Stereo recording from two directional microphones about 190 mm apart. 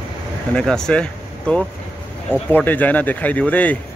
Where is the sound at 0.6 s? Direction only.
5° left (ahead or behind).